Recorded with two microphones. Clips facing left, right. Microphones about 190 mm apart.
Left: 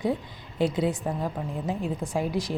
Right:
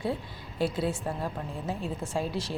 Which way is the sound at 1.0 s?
5° left (ahead or behind).